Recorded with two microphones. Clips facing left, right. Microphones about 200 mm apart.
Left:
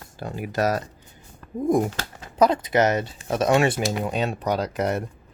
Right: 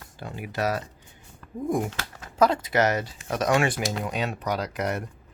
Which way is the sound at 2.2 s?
20° left (ahead or behind).